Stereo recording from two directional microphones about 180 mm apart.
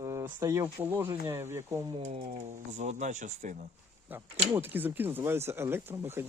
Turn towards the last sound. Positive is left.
turn(degrees=-15)  # may be behind; listen again after turning